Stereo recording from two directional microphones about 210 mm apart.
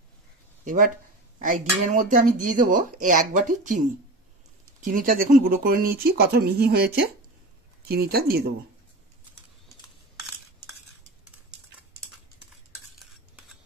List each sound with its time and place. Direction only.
0.7 s speech: 40° right (ahead or behind)
4.8 s speech: 40° right (ahead or behind)